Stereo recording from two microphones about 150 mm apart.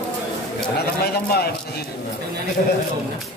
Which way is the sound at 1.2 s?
90° left.